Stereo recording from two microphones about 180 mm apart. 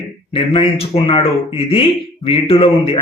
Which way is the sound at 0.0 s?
30° left (ahead or behind).